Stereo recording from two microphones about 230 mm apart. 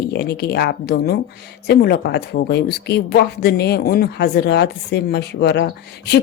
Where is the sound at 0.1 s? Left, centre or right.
Left.